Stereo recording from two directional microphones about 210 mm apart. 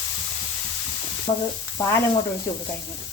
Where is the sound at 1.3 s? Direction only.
20° left (ahead or behind).